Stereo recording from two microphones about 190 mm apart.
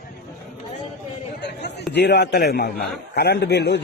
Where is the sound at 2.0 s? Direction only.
60° left (ahead or behind).